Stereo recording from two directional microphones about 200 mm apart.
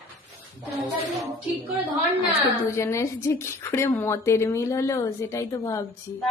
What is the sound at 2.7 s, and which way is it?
A woman's voice, 15° left (ahead or behind).